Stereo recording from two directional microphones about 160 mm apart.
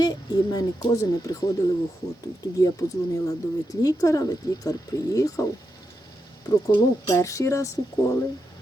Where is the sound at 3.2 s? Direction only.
20° left (ahead or behind).